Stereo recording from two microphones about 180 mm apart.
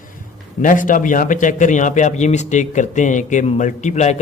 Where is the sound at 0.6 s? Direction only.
45° left (ahead or behind).